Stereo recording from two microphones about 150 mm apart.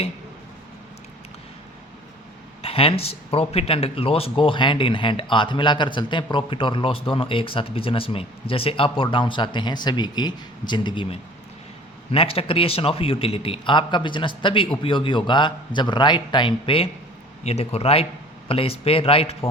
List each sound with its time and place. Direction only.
2.6 s speech: 40° left (ahead or behind)